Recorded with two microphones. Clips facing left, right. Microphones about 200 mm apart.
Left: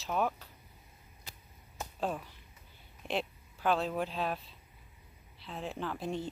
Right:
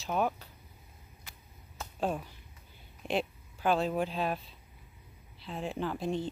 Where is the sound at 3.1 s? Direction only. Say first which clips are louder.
Right 3 dB; centre (ahead or behind).